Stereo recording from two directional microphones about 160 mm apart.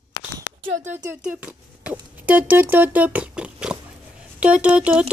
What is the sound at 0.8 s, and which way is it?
Speech, 50° right (ahead or behind).